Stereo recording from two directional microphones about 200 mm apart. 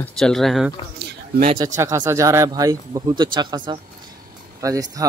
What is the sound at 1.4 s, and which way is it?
Speech, 20° right (ahead or behind).